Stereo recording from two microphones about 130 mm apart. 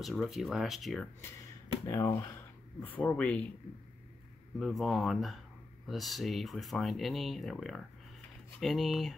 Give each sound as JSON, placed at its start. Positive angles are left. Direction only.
{"t": 0.0, "sound": "speech", "side_deg": 0}
{"t": 1.9, "sound": "speech", "side_deg": 25}
{"t": 4.6, "sound": "speech", "side_deg": 0}